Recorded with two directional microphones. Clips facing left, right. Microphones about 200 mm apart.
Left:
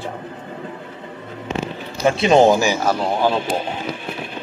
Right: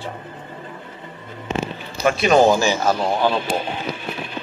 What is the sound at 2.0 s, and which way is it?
Speech, 25° left (ahead or behind).